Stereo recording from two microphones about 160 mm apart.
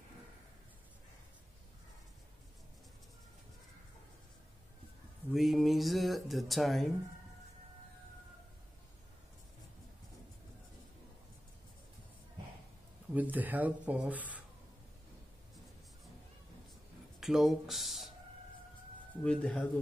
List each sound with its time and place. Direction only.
5.3 s speech: centre (ahead or behind)
13.1 s speech: 10° right (ahead or behind)
17.2 s speech: centre (ahead or behind)
19.2 s speech: 5° left (ahead or behind)